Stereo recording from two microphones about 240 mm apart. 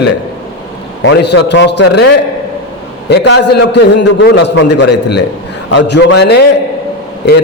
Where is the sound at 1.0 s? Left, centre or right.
Left.